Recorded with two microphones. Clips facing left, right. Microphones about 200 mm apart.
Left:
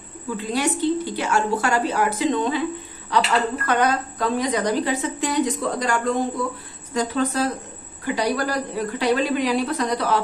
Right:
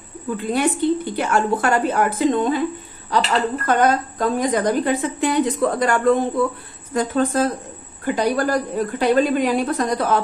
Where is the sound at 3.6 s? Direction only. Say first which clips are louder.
Right 3 dB; 45° right (ahead or behind).